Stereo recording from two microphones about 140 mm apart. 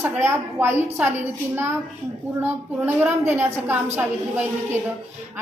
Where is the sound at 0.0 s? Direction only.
15° right (ahead or behind).